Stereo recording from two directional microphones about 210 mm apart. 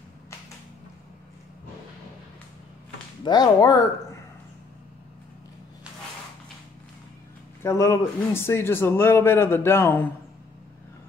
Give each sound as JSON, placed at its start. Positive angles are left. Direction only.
{"t": 3.3, "sound": "a man's voice", "side_deg": 20}
{"t": 7.6, "sound": "a man's voice", "side_deg": 15}